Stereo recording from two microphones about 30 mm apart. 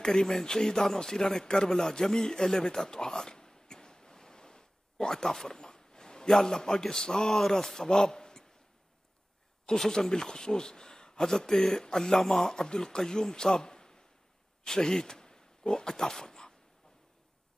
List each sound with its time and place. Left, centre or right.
0.0 s speech: centre
2.9 s a sound: centre
7.3 s speech: centre
9.7 s speech: left; by 12.6 s centre
12.6 s a man's voice: left
14.6 s oink: left
15.8 s dog: centre